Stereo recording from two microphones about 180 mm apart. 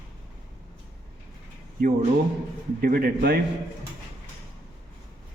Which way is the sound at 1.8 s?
55° right (ahead or behind).